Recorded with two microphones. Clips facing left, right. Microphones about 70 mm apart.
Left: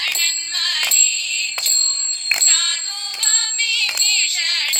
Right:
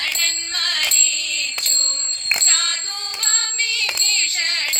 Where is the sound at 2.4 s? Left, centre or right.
Right.